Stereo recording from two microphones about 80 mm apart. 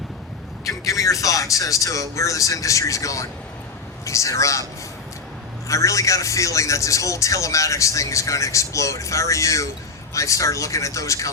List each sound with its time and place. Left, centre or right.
0.6 s a man's voice: left
5.6 s a man's voice: left